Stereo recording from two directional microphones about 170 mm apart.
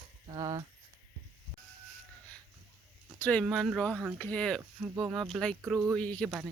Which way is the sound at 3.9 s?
10° right (ahead or behind).